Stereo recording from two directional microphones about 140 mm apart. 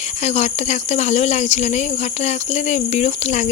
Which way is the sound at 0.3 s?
55° left (ahead or behind).